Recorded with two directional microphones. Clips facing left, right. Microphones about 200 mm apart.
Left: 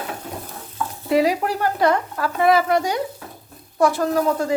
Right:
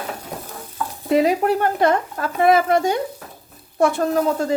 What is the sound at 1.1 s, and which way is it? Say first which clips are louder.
Speech: right 2 dB; 25° right (ahead or behind).